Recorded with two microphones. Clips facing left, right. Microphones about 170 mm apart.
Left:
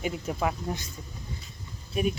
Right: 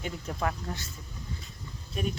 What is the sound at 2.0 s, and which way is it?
Speech, 10° left (ahead or behind).